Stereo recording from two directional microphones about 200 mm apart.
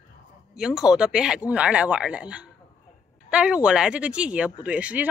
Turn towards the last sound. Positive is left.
turn(degrees=-5)  # may be behind; listen again after turning